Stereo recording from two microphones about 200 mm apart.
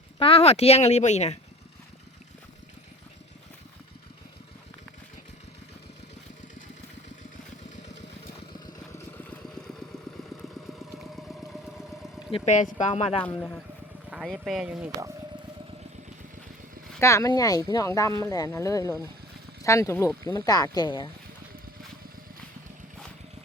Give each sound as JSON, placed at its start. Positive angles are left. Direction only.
{"t": 0.2, "sound": "speech", "side_deg": 30}
{"t": 8.5, "sound": "vehicle", "side_deg": 20}
{"t": 10.9, "sound": "vehicle", "side_deg": 0}
{"t": 12.3, "sound": "speech", "side_deg": 35}
{"t": 14.1, "sound": "speech", "side_deg": 0}
{"t": 17.0, "sound": "speech", "side_deg": 15}